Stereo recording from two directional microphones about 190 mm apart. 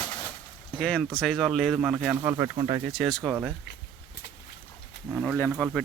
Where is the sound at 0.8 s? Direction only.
5° left (ahead or behind).